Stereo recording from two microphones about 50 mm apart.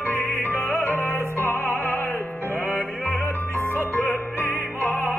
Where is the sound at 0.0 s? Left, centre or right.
Left.